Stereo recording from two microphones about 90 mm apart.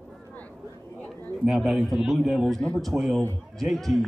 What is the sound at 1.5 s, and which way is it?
A man's voice, centre (ahead or behind).